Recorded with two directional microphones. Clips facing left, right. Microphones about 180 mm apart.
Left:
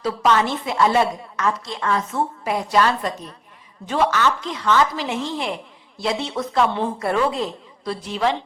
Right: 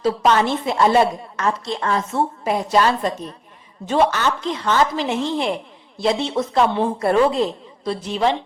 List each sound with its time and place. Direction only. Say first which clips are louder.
0.0 s a woman's voice: right 2 dB; 30° right (ahead or behind)